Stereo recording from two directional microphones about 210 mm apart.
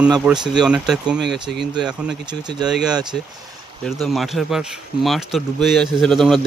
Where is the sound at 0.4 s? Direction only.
5° right (ahead or behind).